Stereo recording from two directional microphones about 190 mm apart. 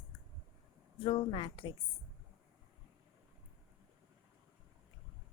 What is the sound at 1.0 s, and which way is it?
Speech, 30° left (ahead or behind).